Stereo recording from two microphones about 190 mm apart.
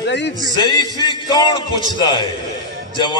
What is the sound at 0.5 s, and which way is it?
A man's voice, 20° left (ahead or behind).